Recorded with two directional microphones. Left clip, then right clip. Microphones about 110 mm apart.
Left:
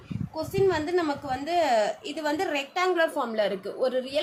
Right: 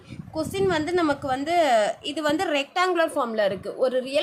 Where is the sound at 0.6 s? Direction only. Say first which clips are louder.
Right 1 dB; 90° right.